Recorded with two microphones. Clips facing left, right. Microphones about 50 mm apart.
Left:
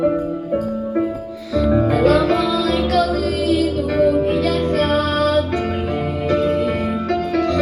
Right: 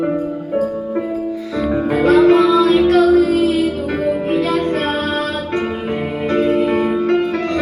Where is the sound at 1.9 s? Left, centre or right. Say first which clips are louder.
Right 8 dB; right.